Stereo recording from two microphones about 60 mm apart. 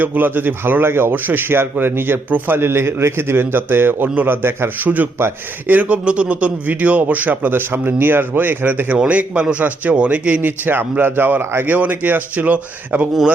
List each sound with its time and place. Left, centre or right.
0.0 s a man's voice: right
4.1 s a man's voice: right